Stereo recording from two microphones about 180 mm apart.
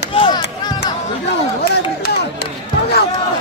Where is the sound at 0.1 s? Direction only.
30° left (ahead or behind).